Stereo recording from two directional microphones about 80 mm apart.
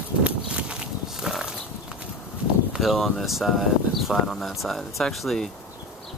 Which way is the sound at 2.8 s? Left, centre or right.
Centre.